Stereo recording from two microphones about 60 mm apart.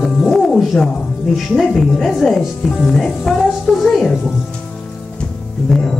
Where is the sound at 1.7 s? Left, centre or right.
Centre.